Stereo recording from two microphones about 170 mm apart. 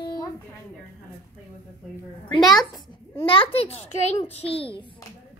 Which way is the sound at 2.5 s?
30° left (ahead or behind).